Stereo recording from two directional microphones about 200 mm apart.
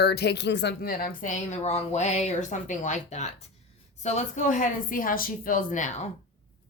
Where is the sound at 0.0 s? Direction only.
55° left (ahead or behind); by 6.1 s 40° left (ahead or behind).